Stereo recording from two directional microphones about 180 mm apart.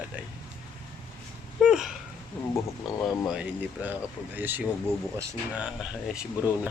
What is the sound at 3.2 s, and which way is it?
Speech, 5° right (ahead or behind).